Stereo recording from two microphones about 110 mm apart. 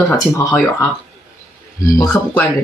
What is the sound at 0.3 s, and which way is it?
Speech, 25° left (ahead or behind).